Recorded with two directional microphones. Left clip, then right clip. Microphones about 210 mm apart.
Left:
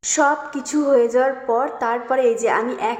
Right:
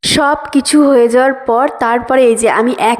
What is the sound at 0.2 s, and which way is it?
A woman's voice, 45° right (ahead or behind).